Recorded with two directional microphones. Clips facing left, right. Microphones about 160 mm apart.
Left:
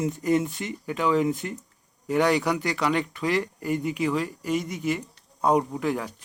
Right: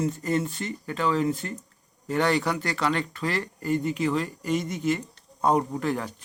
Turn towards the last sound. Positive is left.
turn(degrees=10)  # may be behind; listen again after turning